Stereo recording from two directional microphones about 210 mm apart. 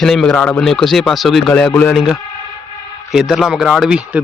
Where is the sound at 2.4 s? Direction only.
15° left (ahead or behind).